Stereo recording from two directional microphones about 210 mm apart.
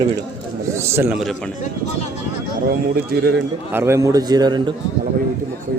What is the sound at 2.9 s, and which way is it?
Speech, 45° right (ahead or behind).